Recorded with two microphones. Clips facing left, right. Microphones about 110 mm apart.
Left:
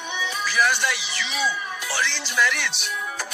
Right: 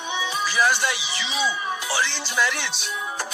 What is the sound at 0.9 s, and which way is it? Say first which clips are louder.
Speech: even; 10° right (ahead or behind).